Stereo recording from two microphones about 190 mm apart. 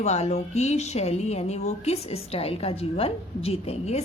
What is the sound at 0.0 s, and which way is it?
Speech, 35° left (ahead or behind).